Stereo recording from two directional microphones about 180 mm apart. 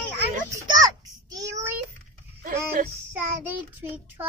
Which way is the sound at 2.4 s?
55° right (ahead or behind).